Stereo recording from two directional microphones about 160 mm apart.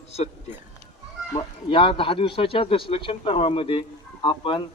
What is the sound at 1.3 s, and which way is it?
A man's voice, 30° left (ahead or behind).